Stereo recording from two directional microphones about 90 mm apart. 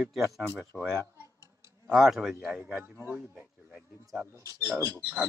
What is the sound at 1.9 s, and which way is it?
Speech, 5° right (ahead or behind).